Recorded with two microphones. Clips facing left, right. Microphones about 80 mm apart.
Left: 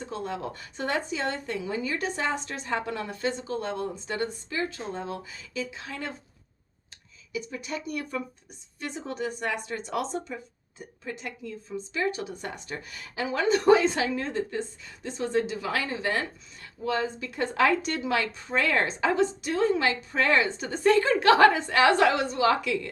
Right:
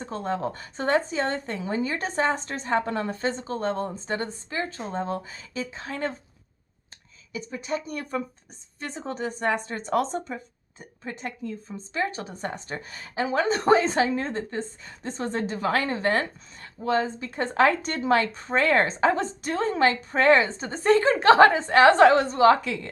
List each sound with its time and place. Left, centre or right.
0.0 s a woman's voice: right
7.3 s a woman's voice: right